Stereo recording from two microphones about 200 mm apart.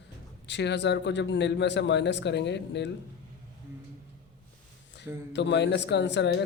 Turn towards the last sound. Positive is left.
turn(degrees=60)  # may be behind; listen again after turning